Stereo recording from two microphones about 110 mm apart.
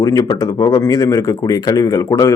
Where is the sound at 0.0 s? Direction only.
35° left (ahead or behind).